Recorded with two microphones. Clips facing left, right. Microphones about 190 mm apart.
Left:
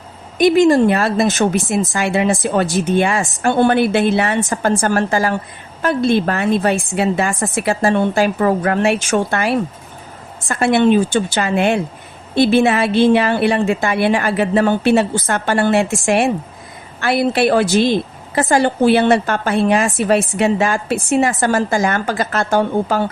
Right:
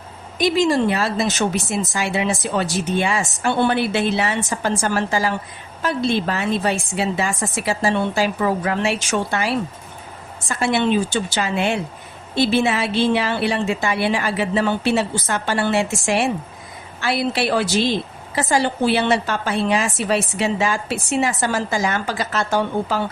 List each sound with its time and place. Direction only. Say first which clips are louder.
0.3 s a woman's voice: left 6 dB; 55° left (ahead or behind)